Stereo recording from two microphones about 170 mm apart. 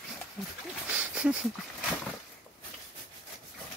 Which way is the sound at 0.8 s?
5° right (ahead or behind).